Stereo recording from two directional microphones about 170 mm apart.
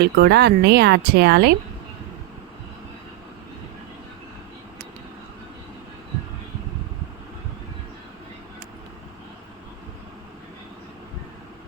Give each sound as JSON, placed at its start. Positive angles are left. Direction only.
{"t": 0.0, "sound": "speech", "side_deg": -75}